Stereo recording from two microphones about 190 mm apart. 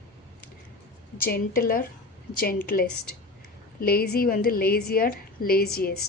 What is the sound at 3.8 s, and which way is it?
A woman's voice, 55° left (ahead or behind).